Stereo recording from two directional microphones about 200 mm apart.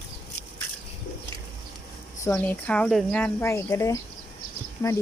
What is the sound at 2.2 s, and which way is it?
Speech, 10° left (ahead or behind).